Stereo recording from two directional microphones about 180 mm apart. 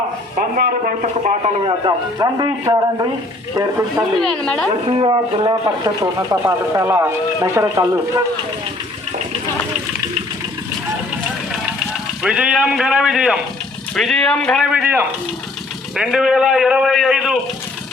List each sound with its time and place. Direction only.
0.3 s speech: 50° right (ahead or behind)
1.6 s speech: 25° right (ahead or behind)
4.2 s a man's voice: 5° left (ahead or behind)
4.9 s speech: 30° right (ahead or behind)
12.2 s a man's voice: 5° right (ahead or behind)